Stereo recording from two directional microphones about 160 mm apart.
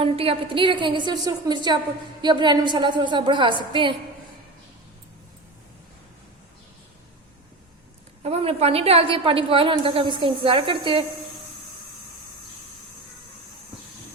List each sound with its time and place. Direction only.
0.0 s a woman's voice: 35° right (ahead or behind)
8.2 s a woman's voice: 40° right (ahead or behind)